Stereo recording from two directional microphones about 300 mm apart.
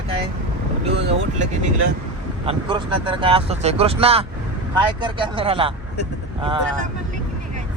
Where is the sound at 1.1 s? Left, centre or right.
Right.